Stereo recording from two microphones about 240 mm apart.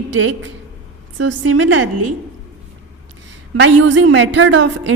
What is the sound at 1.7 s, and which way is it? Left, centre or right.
Speech, right.